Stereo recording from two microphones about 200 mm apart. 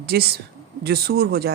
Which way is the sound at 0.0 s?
50° right (ahead or behind).